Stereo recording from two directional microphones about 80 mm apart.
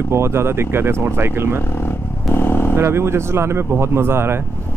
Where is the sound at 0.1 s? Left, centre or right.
Right.